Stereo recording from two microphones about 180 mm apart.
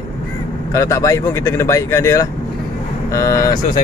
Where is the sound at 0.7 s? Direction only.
15° left (ahead or behind).